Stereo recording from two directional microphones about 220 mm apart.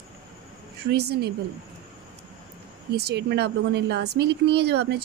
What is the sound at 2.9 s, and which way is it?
Speech, 50° right (ahead or behind).